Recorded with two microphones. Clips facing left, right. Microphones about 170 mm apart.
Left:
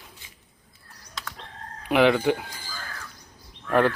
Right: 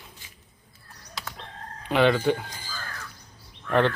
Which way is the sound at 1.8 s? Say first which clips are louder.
Left 1 dB; 10° left (ahead or behind).